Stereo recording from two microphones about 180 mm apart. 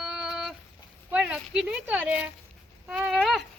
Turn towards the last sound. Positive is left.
turn(degrees=0)  # may be behind; listen again after turning